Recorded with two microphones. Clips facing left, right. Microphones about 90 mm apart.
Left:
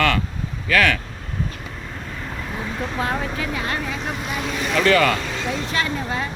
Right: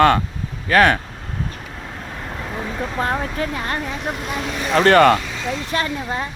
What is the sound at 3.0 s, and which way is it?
Speech, 40° right (ahead or behind).